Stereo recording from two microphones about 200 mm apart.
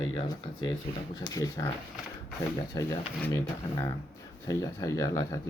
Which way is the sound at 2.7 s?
15° left (ahead or behind).